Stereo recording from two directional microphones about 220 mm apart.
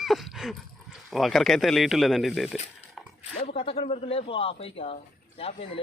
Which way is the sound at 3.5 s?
25° left (ahead or behind).